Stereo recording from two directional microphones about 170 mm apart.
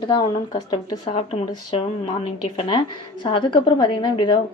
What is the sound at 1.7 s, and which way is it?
A woman's voice, 35° left (ahead or behind).